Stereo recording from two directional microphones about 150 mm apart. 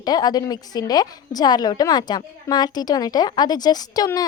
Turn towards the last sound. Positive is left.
turn(degrees=25)  # may be behind; listen again after turning